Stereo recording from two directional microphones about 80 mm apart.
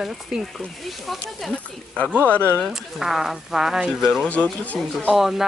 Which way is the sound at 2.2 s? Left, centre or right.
Centre.